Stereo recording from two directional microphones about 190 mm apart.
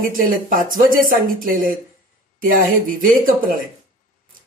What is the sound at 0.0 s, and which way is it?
Speech, 45° right (ahead or behind).